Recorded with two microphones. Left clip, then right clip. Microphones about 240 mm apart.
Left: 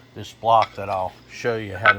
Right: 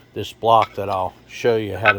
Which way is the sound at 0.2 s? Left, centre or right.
Right.